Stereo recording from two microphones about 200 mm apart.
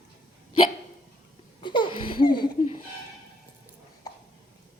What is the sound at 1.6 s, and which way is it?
Laughter, 25° left (ahead or behind).